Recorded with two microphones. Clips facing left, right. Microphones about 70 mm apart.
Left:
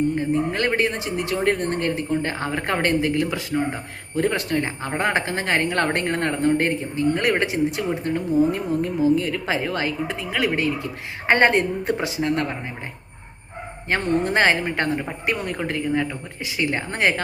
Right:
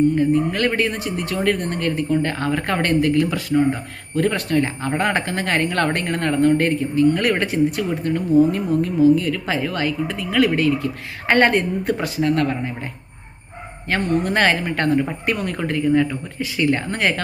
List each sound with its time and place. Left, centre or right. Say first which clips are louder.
0.2 s a woman's voice: right 4 dB; left
13.9 s a woman's voice: right 1 dB; left